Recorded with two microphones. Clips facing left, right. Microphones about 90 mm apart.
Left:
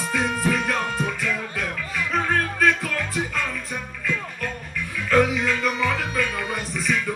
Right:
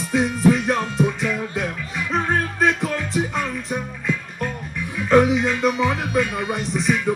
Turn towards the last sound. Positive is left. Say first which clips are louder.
# right 4 dB
turn(degrees=-25)  # may be behind; listen again after turning